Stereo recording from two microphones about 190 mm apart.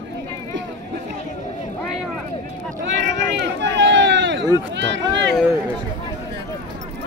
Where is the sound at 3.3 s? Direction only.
70° right (ahead or behind).